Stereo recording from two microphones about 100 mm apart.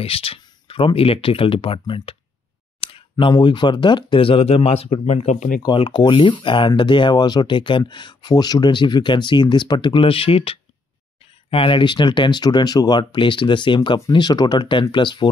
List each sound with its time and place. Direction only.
0.0 s speech: 70° left (ahead or behind)
5.8 s speech: 50° left (ahead or behind); by 10.6 s 75° left (ahead or behind)
11.5 s speech: 60° left (ahead or behind)